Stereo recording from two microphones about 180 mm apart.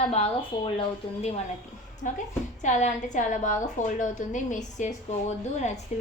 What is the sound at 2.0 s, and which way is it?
A woman's voice, 45° left (ahead or behind).